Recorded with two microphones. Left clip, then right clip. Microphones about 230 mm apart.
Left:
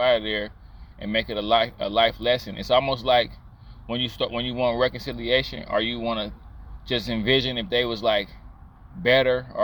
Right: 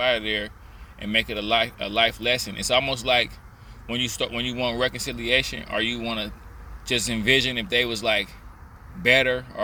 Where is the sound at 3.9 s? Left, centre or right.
Left.